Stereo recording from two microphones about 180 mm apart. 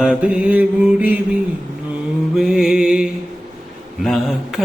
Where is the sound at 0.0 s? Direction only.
5° right (ahead or behind).